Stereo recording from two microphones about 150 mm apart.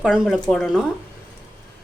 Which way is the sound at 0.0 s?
Centre (ahead or behind).